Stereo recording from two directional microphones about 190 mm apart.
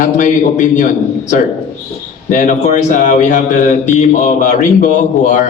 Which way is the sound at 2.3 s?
40° left (ahead or behind).